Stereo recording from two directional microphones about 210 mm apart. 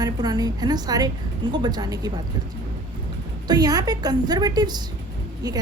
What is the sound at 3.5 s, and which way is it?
A woman's voice, 20° right (ahead or behind).